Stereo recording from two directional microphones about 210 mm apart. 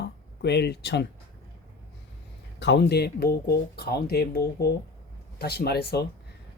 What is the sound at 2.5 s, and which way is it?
Speech, 55° left (ahead or behind).